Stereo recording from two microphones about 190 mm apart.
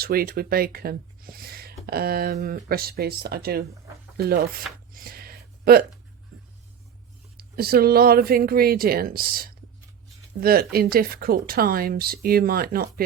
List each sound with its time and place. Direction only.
0.0 s speech: 50° right (ahead or behind)
4.9 s a sound: 50° right (ahead or behind)
7.3 s speech: 55° right (ahead or behind)